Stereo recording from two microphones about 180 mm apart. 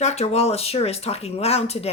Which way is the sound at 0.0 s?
35° left (ahead or behind).